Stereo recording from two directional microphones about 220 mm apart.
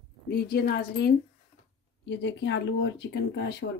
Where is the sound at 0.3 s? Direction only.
45° left (ahead or behind).